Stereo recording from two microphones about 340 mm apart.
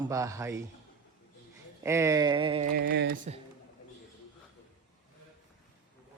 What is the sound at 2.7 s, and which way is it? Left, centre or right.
Speech, right.